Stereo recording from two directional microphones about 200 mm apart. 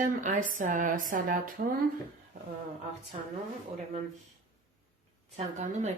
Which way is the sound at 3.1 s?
35° right (ahead or behind).